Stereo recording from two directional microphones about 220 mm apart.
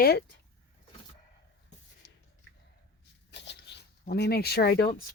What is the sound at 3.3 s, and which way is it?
Speech, 50° left (ahead or behind).